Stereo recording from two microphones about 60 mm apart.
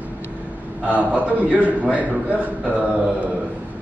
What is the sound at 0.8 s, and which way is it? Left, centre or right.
A man's voice, right.